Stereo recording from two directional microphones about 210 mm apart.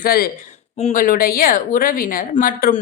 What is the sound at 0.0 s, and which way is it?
Speech, 45° left (ahead or behind).